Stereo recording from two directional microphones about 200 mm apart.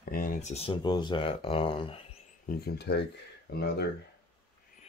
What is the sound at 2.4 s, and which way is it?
Speech, 50° left (ahead or behind).